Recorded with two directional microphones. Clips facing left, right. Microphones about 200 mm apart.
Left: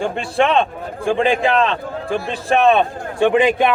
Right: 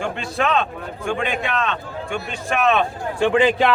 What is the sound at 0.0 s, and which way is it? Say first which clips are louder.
A man's voice: left 5 dB; 30° left (ahead or behind).